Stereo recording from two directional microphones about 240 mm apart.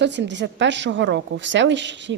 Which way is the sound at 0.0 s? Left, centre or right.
Right.